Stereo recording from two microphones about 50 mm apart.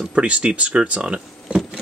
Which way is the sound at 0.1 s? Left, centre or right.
Right.